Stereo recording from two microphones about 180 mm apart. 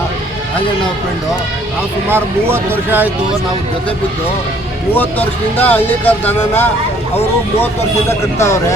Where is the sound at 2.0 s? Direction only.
10° right (ahead or behind).